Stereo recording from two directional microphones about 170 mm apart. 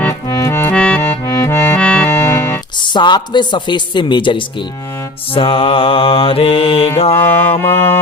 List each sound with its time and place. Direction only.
0.0 s accordion: 15° left (ahead or behind)
2.8 s speech: 25° left (ahead or behind)
5.3 s mantra: 30° left (ahead or behind)
7.2 s mantra: 10° left (ahead or behind)